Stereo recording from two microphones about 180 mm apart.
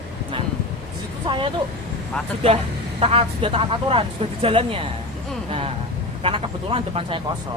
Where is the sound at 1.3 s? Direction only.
25° right (ahead or behind).